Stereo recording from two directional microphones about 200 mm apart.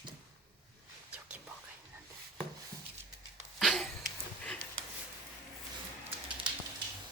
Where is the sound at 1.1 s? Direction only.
5° right (ahead or behind).